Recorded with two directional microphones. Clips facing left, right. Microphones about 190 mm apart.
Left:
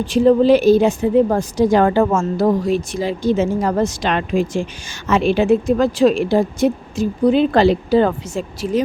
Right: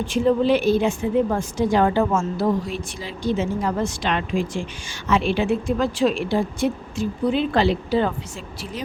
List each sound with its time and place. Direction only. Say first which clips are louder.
0.0 s a woman's voice: left 6 dB; 35° left (ahead or behind)
1.8 s a woman's voice: left 4 dB; 50° left (ahead or behind)